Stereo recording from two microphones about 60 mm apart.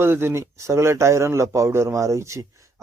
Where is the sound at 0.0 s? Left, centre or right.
Right.